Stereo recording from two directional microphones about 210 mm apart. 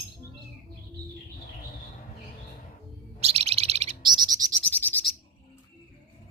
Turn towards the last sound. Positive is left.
turn(degrees=10)  # may be behind; listen again after turning